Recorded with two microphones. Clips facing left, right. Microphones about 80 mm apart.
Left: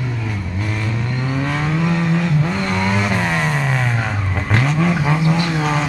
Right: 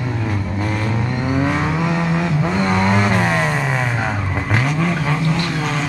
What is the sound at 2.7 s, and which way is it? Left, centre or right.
Vehicle, right.